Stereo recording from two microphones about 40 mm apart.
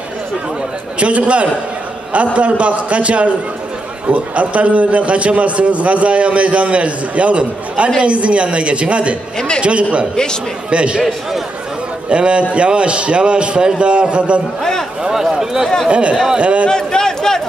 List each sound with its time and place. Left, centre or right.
0.9 s a man's voice: right
12.1 s a man's voice: right
14.6 s a man's voice: centre
15.0 s speech: centre
15.9 s a man's voice: right
16.6 s a man's voice: centre